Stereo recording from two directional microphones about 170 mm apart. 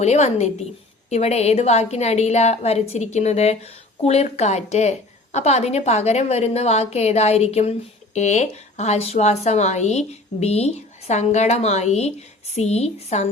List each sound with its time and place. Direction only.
0.0 s speech: 40° left (ahead or behind)